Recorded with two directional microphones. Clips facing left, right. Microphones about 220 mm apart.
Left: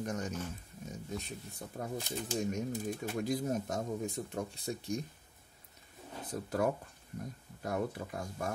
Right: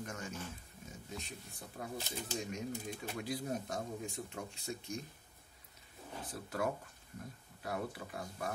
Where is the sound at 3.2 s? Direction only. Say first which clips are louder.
Left 5 dB; 45° left (ahead or behind).